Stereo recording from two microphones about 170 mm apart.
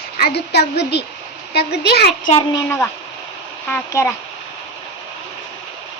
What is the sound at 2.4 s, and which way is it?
A child's voice, 20° left (ahead or behind).